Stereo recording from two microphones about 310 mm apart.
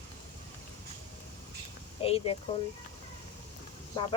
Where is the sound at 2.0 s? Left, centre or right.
Centre.